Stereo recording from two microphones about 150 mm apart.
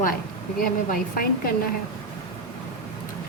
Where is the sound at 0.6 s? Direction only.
70° left (ahead or behind).